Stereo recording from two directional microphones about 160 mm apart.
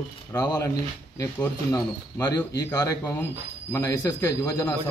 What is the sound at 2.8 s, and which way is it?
Speech, 20° left (ahead or behind).